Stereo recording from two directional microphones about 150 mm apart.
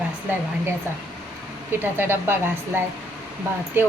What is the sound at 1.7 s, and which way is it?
A woman's voice, 15° right (ahead or behind).